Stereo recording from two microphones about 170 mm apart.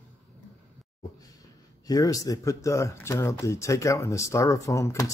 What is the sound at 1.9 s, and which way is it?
Speech, 20° left (ahead or behind).